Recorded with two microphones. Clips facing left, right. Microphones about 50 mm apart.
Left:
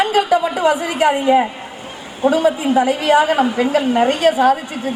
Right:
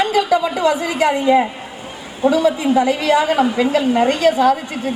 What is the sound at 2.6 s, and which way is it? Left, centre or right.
A man's voice, left.